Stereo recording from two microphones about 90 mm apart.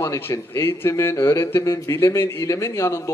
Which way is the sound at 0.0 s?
30° left (ahead or behind).